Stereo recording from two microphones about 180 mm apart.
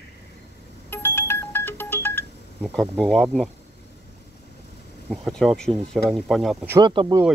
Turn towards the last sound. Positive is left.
turn(degrees=-25)  # may be behind; listen again after turning